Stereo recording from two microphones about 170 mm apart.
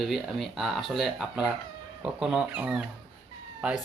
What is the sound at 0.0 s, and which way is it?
Speech, centre (ahead or behind).